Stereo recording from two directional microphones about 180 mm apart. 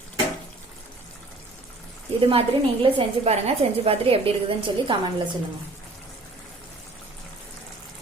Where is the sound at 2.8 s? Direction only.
35° right (ahead or behind).